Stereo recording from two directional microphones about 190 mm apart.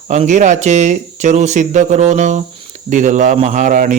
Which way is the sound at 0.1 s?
40° right (ahead or behind).